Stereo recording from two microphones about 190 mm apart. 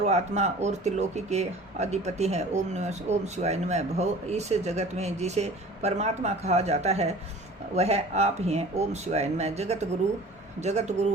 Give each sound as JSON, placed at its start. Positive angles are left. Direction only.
{"t": 0.0, "sound": "speech", "side_deg": -35}